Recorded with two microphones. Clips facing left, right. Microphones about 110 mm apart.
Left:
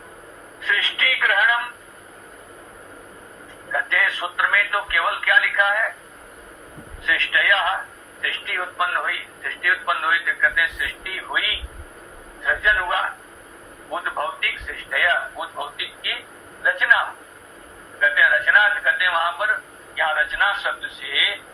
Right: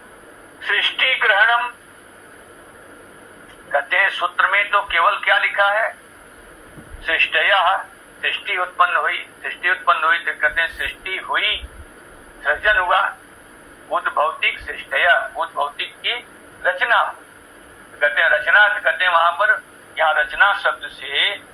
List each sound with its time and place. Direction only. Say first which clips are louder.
0.7 s telephone: right 1 dB; 55° right (ahead or behind)
3.7 s speech: right 4 dB; 55° right (ahead or behind)
7.0 s speech: right 1 dB; 55° right (ahead or behind)
18.0 s speech: right 2 dB; 60° right (ahead or behind)